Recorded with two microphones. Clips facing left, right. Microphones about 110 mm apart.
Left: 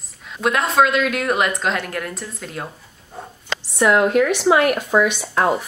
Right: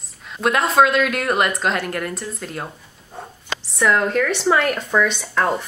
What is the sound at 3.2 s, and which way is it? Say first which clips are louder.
Dog: even; centre (ahead or behind).